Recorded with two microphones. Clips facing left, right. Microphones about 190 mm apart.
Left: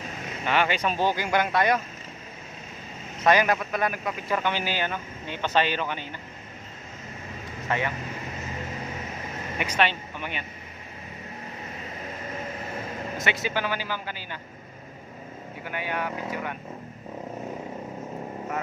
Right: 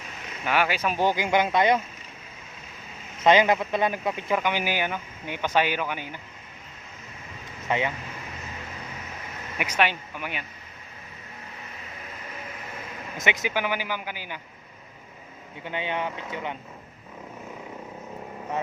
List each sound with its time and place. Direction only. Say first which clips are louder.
0.4 s speech: even; 5° right (ahead or behind)
3.2 s speech: right 2 dB; 20° right (ahead or behind)
4.4 s speech: right 1 dB; 15° right (ahead or behind)
7.7 s speech: right 2 dB; 15° right (ahead or behind)
9.6 s speech: even; 10° right (ahead or behind)
13.2 s speech: right 2 dB; 15° right (ahead or behind)
15.6 s speech: right 1 dB; 20° right (ahead or behind)